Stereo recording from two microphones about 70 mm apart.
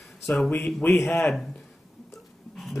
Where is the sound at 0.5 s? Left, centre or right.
Left.